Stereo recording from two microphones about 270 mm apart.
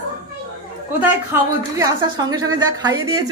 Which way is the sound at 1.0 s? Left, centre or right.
Centre.